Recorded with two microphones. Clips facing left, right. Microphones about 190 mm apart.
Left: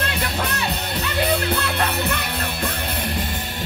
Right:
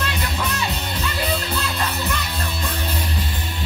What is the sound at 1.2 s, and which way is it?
Music, 60° left (ahead or behind).